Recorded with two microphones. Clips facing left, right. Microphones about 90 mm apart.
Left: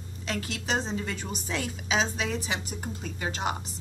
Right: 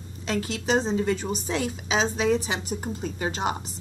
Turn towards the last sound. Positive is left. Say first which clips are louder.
# right 4 dB
turn(degrees=-30)  # may be behind; listen again after turning